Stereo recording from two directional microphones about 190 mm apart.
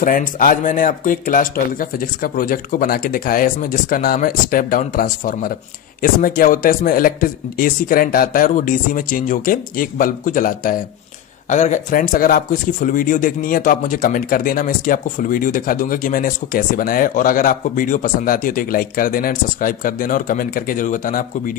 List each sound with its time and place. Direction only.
0.0 s speech: 45° left (ahead or behind)